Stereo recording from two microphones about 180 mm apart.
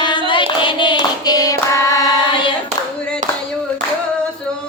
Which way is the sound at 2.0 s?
25° left (ahead or behind).